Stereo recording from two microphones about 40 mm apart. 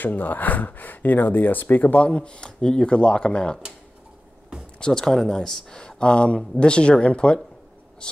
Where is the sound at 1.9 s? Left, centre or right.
Left.